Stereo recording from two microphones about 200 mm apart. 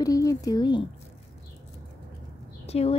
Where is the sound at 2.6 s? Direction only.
30° left (ahead or behind).